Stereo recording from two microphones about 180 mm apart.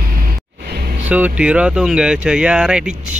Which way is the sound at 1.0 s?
10° right (ahead or behind).